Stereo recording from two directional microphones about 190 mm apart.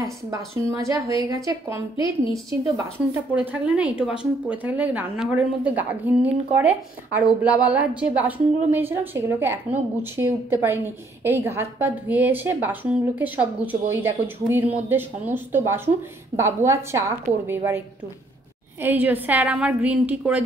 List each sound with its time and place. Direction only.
0.0 s a woman's voice: 15° right (ahead or behind)
3.3 s a woman's voice: 5° right (ahead or behind)